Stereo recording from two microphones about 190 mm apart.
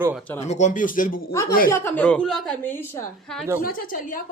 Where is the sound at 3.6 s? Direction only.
45° left (ahead or behind).